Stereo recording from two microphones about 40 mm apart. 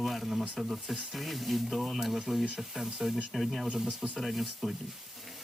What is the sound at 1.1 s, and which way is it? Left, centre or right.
Speech, centre.